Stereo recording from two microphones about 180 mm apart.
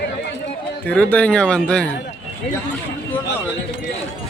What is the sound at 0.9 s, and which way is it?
Speech, 5° left (ahead or behind).